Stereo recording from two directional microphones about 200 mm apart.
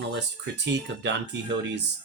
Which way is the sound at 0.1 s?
60° right (ahead or behind).